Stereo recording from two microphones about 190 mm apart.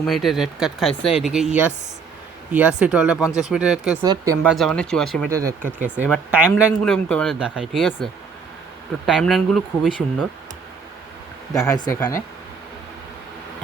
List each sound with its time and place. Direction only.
0.0 s speech: centre (ahead or behind)
2.5 s speech: 5° right (ahead or behind)
4.0 s speech: 20° right (ahead or behind)
4.4 s speech: 5° left (ahead or behind)
5.3 s speech: 15° right (ahead or behind)
6.8 s speech: 5° left (ahead or behind)
9.0 s speech: centre (ahead or behind)
11.5 s speech: 20° left (ahead or behind)